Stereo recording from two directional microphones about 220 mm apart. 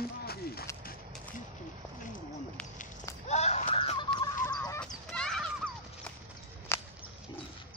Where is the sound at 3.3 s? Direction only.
30° left (ahead or behind).